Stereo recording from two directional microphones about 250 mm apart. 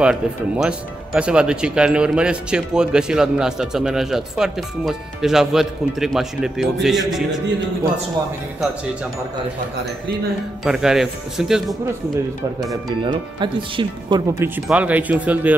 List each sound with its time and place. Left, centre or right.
0.0 s speech: centre
10.6 s speech: centre
13.0 s speech: centre
14.7 s speech: centre